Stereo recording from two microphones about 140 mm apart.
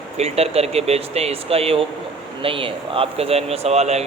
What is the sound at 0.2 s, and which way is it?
Speech, 50° right (ahead or behind).